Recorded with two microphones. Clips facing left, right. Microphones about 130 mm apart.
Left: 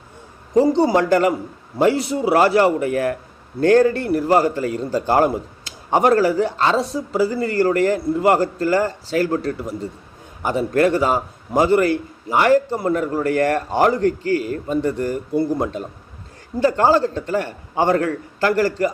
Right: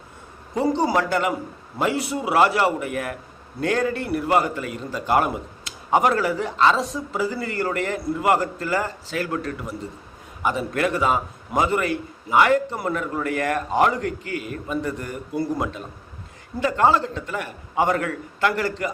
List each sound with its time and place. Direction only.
0.9 s a man's voice: 35° left (ahead or behind)